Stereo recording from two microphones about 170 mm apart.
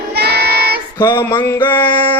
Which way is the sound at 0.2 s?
70° right (ahead or behind).